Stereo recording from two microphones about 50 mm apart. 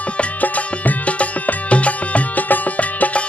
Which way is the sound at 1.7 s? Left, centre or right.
Left.